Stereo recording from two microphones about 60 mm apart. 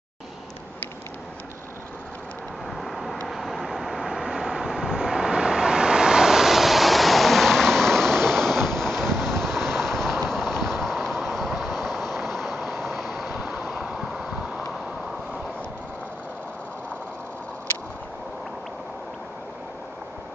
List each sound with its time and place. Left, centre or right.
2.7 s vehicle: centre
13.4 s vehicle: centre